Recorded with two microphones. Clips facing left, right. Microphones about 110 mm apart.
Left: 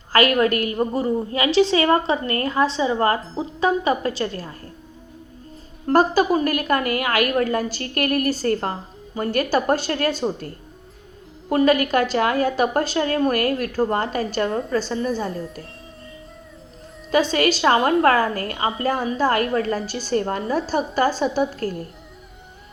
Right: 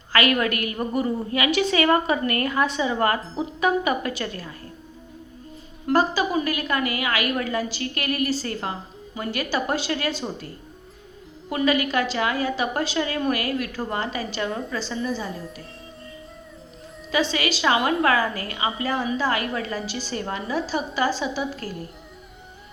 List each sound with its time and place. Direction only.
0.1 s a woman's voice: 40° left (ahead or behind)
5.9 s a woman's voice: 45° left (ahead or behind)
17.1 s a woman's voice: 45° left (ahead or behind)